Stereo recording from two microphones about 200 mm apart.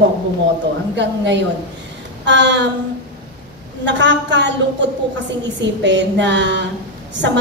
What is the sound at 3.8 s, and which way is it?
A woman's voice, 65° right (ahead or behind).